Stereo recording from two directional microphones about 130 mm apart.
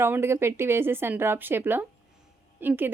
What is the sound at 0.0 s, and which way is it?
A woman's voice, 20° right (ahead or behind).